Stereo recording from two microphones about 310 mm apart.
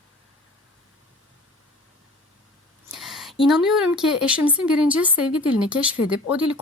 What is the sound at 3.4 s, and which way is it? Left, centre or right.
A woman's voice, centre.